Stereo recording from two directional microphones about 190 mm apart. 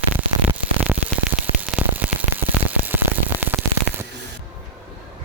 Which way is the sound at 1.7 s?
5° right (ahead or behind).